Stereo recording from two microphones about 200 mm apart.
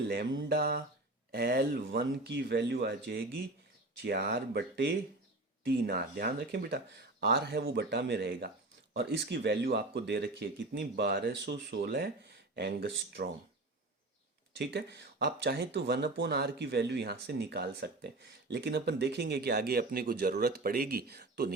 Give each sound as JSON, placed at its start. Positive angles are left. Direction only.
{"t": 0.4, "sound": "speech", "side_deg": -50}
{"t": 14.6, "sound": "speech", "side_deg": -55}